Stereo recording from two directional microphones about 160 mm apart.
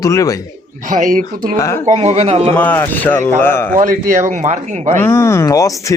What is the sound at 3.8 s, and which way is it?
Speech, 50° right (ahead or behind).